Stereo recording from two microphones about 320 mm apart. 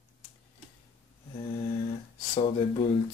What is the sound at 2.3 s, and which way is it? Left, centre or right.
Speech, centre.